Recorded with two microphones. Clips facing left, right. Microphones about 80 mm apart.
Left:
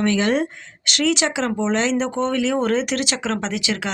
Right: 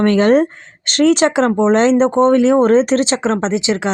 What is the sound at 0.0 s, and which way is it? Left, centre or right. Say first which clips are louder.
Speech: right 8 dB; right.